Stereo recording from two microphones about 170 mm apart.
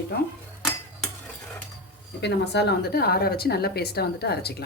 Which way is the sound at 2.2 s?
85° left.